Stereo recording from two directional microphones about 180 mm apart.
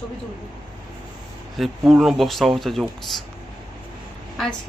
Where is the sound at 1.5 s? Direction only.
Centre (ahead or behind).